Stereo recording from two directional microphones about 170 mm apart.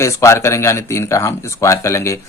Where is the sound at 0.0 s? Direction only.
15° left (ahead or behind).